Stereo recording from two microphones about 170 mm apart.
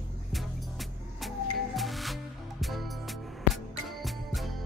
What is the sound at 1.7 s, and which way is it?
Music, centre (ahead or behind).